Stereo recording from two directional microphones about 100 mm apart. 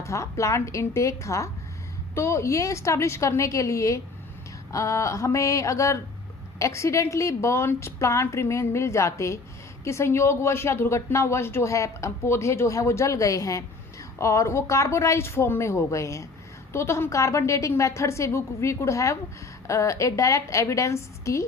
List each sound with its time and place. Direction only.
0.0 s a woman's voice: 30° left (ahead or behind)